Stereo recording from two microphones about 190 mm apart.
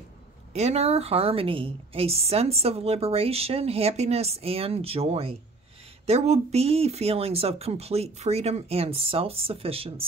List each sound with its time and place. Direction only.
0.5 s a woman's voice: 35° right (ahead or behind)